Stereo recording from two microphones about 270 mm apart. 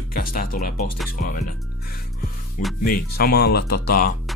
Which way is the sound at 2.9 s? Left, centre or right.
Left.